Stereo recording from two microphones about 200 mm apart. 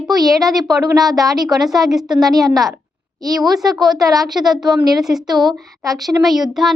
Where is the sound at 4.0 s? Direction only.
15° right (ahead or behind).